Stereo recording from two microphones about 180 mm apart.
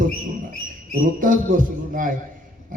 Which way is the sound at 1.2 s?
50° right (ahead or behind).